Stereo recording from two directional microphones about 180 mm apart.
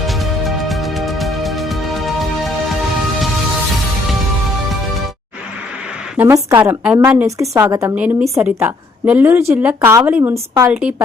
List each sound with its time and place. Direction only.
0.0 s music: centre (ahead or behind)
6.1 s speech: 15° right (ahead or behind)